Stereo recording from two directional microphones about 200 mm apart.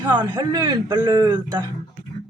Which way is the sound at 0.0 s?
20° right (ahead or behind).